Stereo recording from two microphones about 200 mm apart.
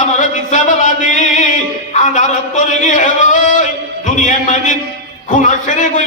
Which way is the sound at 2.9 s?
40° left (ahead or behind).